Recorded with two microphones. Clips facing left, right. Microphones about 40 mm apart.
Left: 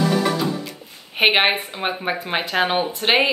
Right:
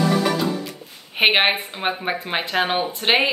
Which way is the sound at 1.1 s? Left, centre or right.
Centre.